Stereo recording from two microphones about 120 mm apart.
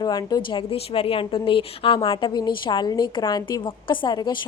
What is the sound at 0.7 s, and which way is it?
A woman's voice, 50° left (ahead or behind).